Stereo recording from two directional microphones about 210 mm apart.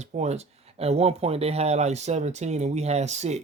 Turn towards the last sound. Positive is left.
turn(degrees=-30)  # may be behind; listen again after turning